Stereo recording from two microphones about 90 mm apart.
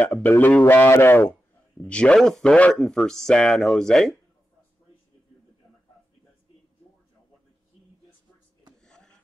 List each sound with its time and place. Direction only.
0.2 s speech: 20° left (ahead or behind)
1.8 s speech: 10° left (ahead or behind)
8.8 s a sound: 10° left (ahead or behind)